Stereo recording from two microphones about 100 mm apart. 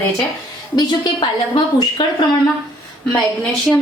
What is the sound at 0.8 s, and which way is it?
A woman's voice, 45° left (ahead or behind).